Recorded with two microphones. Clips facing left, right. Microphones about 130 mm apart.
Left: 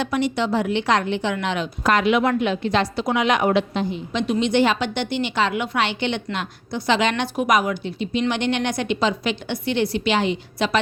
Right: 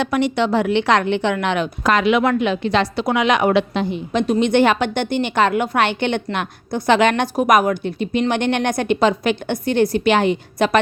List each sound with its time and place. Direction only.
0.0 s a woman's voice: 65° right (ahead or behind)